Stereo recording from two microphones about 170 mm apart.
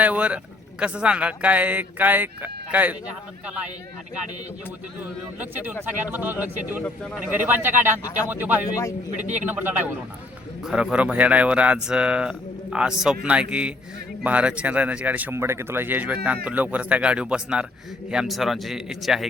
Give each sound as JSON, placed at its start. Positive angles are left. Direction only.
{"t": 0.0, "sound": "speech", "side_deg": -10}
{"t": 5.4, "sound": "speech", "side_deg": -10}
{"t": 6.8, "sound": "speech", "side_deg": 5}
{"t": 7.2, "sound": "speech", "side_deg": -10}
{"t": 8.7, "sound": "a man's voice", "side_deg": 20}
{"t": 9.1, "sound": "a man's voice", "side_deg": -45}
{"t": 9.4, "sound": "speech", "side_deg": -10}